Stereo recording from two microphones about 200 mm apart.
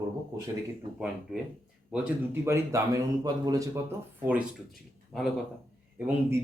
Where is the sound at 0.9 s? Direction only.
5° right (ahead or behind).